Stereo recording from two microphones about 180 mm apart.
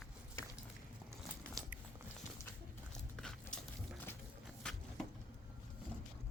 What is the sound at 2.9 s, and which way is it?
Dog, centre (ahead or behind).